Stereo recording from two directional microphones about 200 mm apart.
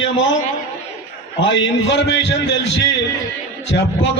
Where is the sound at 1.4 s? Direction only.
65° left (ahead or behind).